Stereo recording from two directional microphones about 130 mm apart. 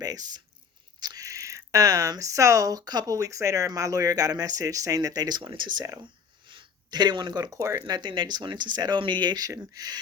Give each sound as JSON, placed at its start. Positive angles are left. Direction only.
{"t": 0.0, "sound": "speech", "side_deg": -30}